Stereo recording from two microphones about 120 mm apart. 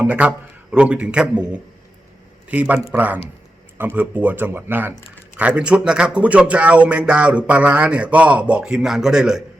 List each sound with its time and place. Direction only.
0.0 s a man's voice: 10° right (ahead or behind)